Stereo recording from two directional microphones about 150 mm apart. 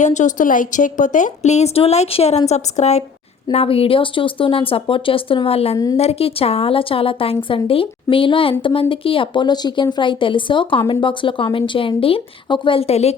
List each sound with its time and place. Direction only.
0.0 s a woman's voice: 55° left (ahead or behind)
5.7 s speech: 25° left (ahead or behind)
6.0 s speech: 40° left (ahead or behind)